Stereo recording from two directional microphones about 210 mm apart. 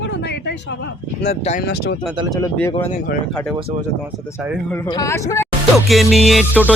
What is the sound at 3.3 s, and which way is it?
Music, centre (ahead or behind).